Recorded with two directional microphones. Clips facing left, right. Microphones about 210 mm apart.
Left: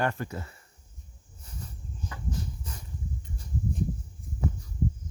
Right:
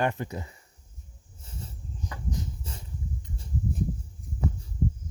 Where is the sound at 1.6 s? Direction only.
20° right (ahead or behind).